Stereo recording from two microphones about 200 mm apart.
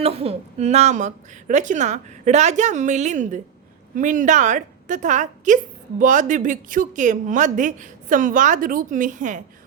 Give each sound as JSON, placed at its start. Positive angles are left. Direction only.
{"t": 0.0, "sound": "a woman's voice", "side_deg": -30}